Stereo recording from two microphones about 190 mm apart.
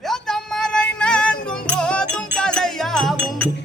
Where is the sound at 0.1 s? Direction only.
Centre (ahead or behind).